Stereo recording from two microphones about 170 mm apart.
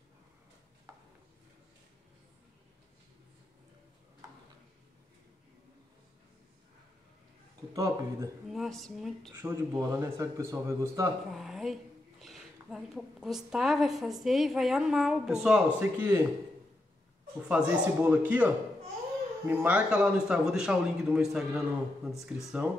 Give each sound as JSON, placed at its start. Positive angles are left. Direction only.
{"t": 7.7, "sound": "speech", "side_deg": -20}
{"t": 8.5, "sound": "a man's voice", "side_deg": 0}
{"t": 9.3, "sound": "speech", "side_deg": -15}
{"t": 11.3, "sound": "a woman's voice", "side_deg": 0}
{"t": 17.4, "sound": "a man's voice", "side_deg": -5}